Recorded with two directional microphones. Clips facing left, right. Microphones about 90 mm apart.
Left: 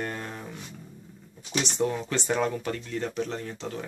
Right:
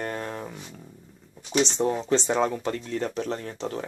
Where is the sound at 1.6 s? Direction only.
30° right (ahead or behind).